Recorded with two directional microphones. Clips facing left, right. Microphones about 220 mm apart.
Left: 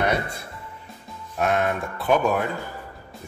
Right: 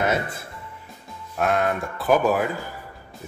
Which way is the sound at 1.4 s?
Centre (ahead or behind).